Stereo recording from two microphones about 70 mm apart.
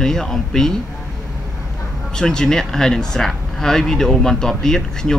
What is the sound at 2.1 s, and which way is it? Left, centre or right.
Speech, centre.